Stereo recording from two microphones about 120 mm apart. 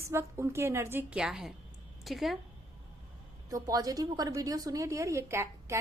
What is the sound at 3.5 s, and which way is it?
A woman's voice, 30° right (ahead or behind).